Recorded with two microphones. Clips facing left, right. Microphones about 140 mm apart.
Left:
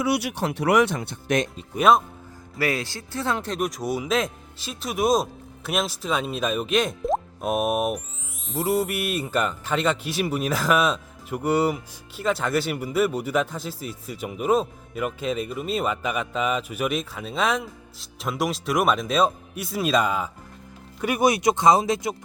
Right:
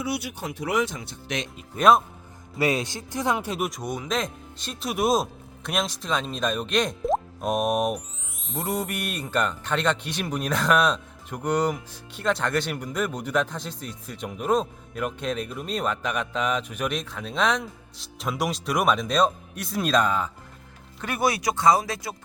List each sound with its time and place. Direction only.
0.0 s speech: 75° left (ahead or behind); by 1.5 s 55° left (ahead or behind)
1.7 s speech: 5° left (ahead or behind)
2.6 s speech: 20° right (ahead or behind); by 22.1 s 20° left (ahead or behind)